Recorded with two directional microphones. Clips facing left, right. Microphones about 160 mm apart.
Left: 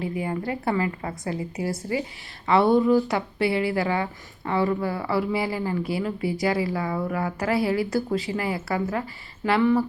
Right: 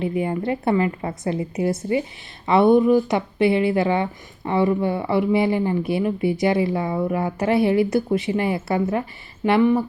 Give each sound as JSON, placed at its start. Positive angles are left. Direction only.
{"t": 0.0, "sound": "speech", "side_deg": -25}